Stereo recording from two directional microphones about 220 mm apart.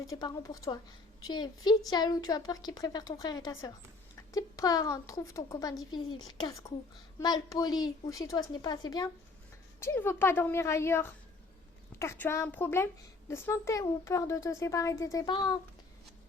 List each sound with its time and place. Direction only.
0.1 s a woman's voice: 15° left (ahead or behind)